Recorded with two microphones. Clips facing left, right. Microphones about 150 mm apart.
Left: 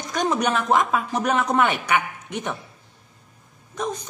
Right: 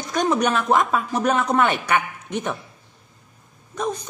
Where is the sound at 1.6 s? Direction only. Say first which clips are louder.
Right 1 dB; 15° left (ahead or behind).